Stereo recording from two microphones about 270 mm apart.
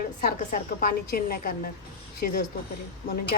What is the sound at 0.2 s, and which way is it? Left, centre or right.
Speech, left.